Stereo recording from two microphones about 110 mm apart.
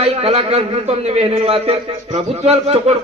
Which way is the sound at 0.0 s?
60° right (ahead or behind).